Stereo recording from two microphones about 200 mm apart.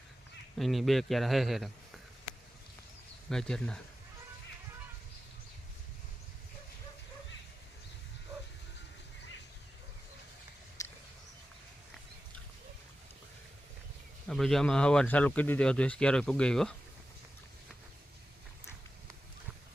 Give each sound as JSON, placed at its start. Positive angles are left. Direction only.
{"t": 0.5, "sound": "speech", "side_deg": 0}
{"t": 3.2, "sound": "speech", "side_deg": 5}
{"t": 10.8, "sound": "a sound", "side_deg": 15}
{"t": 14.3, "sound": "speech", "side_deg": 0}